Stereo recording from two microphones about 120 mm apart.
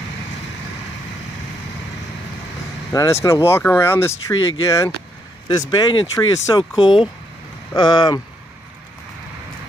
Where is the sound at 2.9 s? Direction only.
25° left (ahead or behind).